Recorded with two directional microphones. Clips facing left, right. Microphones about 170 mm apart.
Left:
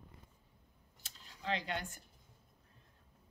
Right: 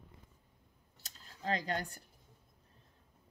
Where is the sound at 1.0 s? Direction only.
40° right (ahead or behind).